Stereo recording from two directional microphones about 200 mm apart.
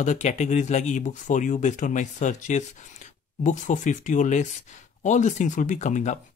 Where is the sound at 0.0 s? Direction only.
35° left (ahead or behind).